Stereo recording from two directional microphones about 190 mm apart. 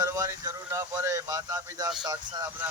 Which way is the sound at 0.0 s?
20° right (ahead or behind).